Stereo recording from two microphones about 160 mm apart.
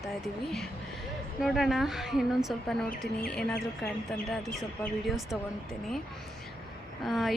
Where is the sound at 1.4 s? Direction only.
Centre (ahead or behind).